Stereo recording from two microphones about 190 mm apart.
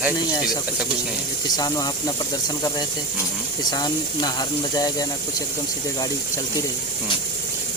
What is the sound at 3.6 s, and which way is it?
Speech, 20° left (ahead or behind).